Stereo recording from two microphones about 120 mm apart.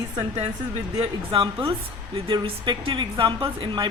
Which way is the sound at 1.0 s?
50° right (ahead or behind).